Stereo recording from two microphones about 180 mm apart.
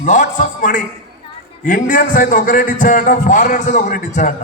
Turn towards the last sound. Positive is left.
turn(degrees=45)  # may be behind; listen again after turning